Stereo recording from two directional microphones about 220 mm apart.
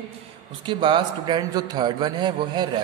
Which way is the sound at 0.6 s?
20° right (ahead or behind).